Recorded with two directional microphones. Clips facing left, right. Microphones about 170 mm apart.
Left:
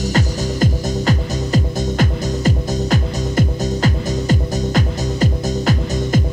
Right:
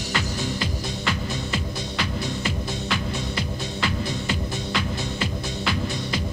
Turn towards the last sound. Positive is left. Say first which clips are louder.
# left 8 dB
turn(degrees=45)  # may be behind; listen again after turning